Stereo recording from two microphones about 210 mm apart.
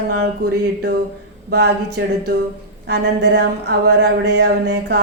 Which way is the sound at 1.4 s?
55° right (ahead or behind).